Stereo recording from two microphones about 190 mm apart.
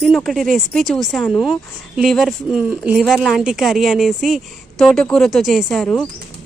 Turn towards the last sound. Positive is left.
turn(degrees=5)  # may be behind; listen again after turning